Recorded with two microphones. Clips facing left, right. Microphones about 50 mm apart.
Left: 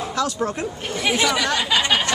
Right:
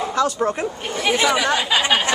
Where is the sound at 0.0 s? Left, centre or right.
Centre.